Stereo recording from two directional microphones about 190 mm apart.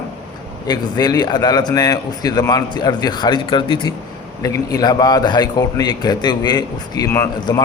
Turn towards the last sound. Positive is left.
turn(degrees=15)  # may be behind; listen again after turning